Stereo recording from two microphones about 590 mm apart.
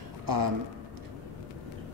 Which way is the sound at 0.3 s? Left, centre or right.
Right.